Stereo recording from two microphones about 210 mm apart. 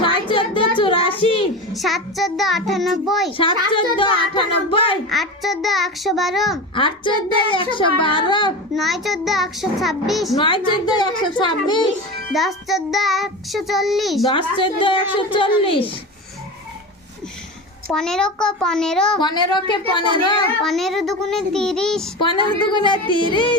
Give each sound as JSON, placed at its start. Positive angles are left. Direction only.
{"t": 0.0, "sound": "child singing", "side_deg": 25}
{"t": 1.7, "sound": "child singing", "side_deg": 0}
{"t": 3.9, "sound": "a woman's voice", "side_deg": 25}
{"t": 5.0, "sound": "child singing", "side_deg": 0}
{"t": 6.7, "sound": "a woman's voice", "side_deg": 25}
{"t": 8.7, "sound": "child singing", "side_deg": 0}
{"t": 10.4, "sound": "a woman's voice", "side_deg": 20}
{"t": 12.3, "sound": "child singing", "side_deg": 0}
{"t": 14.3, "sound": "a woman's voice", "side_deg": 25}
{"t": 17.9, "sound": "child singing", "side_deg": 5}
{"t": 19.2, "sound": "a woman's voice", "side_deg": 20}
{"t": 20.7, "sound": "child singing", "side_deg": 0}
{"t": 22.4, "sound": "a woman's voice", "side_deg": 20}